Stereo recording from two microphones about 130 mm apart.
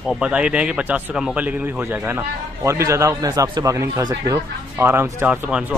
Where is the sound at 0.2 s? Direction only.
10° right (ahead or behind).